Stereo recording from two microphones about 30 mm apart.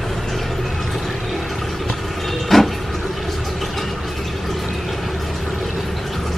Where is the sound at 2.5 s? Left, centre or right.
Centre.